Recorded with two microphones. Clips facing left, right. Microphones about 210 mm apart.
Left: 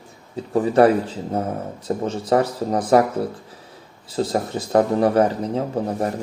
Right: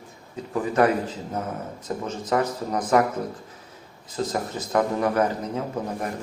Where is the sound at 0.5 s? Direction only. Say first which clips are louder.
Left 6 dB; 35° left (ahead or behind).